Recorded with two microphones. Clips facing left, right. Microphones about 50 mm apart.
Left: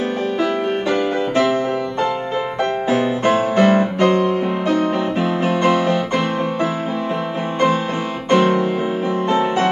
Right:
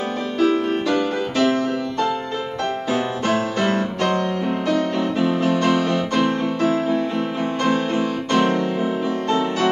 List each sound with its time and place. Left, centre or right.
0.4 s music: left
2.9 s music: left
8.3 s music: centre